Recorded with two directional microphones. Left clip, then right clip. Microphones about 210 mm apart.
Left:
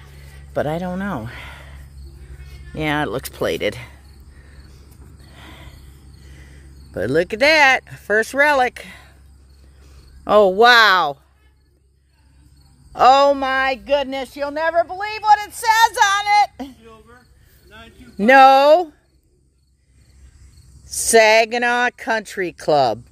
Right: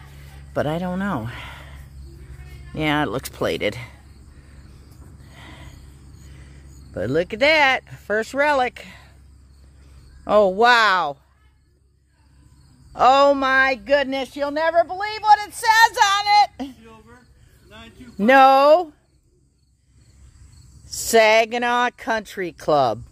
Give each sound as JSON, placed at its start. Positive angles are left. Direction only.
{"t": 0.1, "sound": "a sound", "side_deg": 0}
{"t": 2.7, "sound": "speech", "side_deg": 5}
{"t": 5.2, "sound": "a sound", "side_deg": 10}
{"t": 6.2, "sound": "speech", "side_deg": 20}
{"t": 10.2, "sound": "speech", "side_deg": 20}
{"t": 12.9, "sound": "speech", "side_deg": 15}
{"t": 16.8, "sound": "a sound", "side_deg": -40}
{"t": 18.1, "sound": "speech", "side_deg": 15}
{"t": 20.9, "sound": "speech", "side_deg": 10}